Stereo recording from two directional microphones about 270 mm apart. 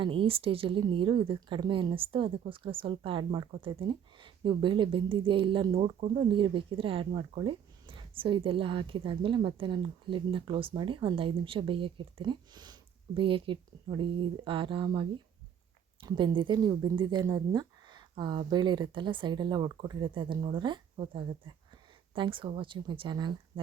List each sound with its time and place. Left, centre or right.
0.0 s a woman's voice: centre